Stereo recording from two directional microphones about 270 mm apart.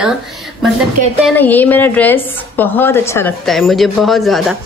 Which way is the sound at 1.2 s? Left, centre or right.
Centre.